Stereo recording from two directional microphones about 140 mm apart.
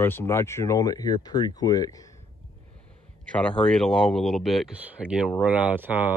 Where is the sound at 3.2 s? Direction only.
5° left (ahead or behind); by 6.1 s 15° right (ahead or behind).